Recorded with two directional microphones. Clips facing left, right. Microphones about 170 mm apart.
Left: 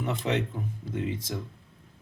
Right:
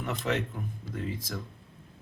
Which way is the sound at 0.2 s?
25° left (ahead or behind).